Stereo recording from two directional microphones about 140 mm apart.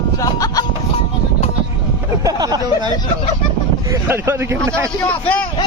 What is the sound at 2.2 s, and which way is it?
Speech, 30° right (ahead or behind).